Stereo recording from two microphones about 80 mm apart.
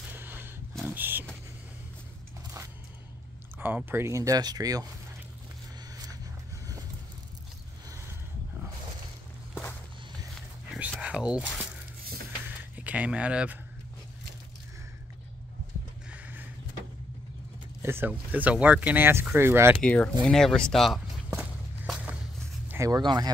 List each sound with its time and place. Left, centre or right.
0.1 s a sound: right
0.8 s vehicle: right
3.5 s speech: right
4.1 s speech: right
11.0 s whispering: centre
12.4 s a sound: centre
16.1 s a sound: right
17.8 s speech: right
19.8 s speech: centre
20.2 s speech: centre
22.8 s speech: right
23.0 s speech: right